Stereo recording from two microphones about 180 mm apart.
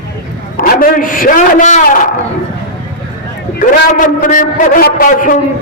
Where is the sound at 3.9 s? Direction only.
45° left (ahead or behind).